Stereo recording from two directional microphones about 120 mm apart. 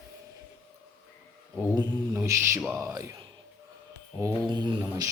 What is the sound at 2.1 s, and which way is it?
A man's voice, 20° right (ahead or behind).